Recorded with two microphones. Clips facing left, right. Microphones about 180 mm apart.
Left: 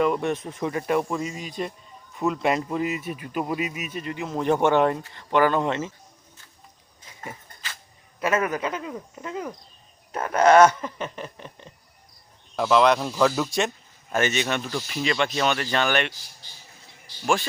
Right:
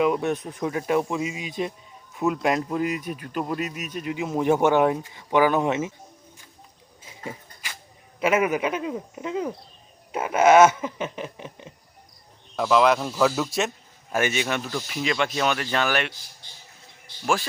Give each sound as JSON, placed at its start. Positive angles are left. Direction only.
{"t": 0.0, "sound": "speech", "side_deg": -5}
{"t": 4.0, "sound": "speech", "side_deg": -10}
{"t": 7.1, "sound": "a sound", "side_deg": -15}
{"t": 8.2, "sound": "speech", "side_deg": -10}
{"t": 12.5, "sound": "speech", "side_deg": 0}